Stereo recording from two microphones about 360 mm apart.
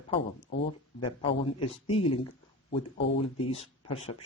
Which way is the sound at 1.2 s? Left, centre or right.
Centre.